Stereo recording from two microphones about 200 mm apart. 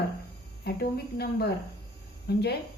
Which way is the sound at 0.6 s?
50° left (ahead or behind).